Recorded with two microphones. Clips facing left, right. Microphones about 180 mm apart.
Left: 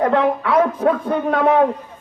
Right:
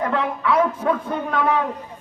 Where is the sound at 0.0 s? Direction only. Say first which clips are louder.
Left 6 dB; 40° left (ahead or behind).